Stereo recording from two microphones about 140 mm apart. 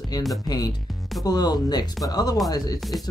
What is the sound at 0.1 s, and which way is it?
Speech, 30° left (ahead or behind).